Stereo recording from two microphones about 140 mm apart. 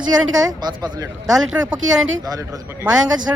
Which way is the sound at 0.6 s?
30° right (ahead or behind).